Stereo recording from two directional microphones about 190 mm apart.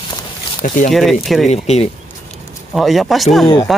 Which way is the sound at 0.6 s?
45° left (ahead or behind).